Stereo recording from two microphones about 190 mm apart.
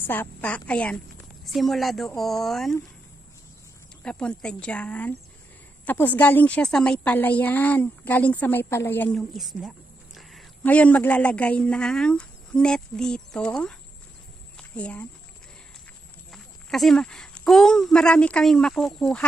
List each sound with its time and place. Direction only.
0.1 s a woman's voice: 10° left (ahead or behind)
4.0 s a woman's voice: 5° left (ahead or behind)
14.5 s a sound: 5° left (ahead or behind)
16.3 s speech: centre (ahead or behind)